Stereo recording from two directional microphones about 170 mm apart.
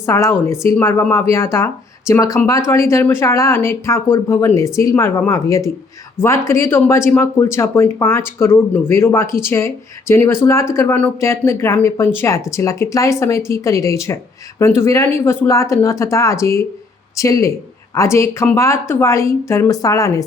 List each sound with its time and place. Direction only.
0.0 s speech: 15° left (ahead or behind)